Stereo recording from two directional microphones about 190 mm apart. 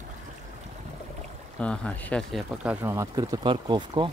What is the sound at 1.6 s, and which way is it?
Speech, 5° left (ahead or behind).